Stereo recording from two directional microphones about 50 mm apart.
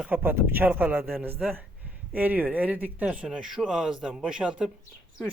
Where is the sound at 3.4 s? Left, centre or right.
Centre.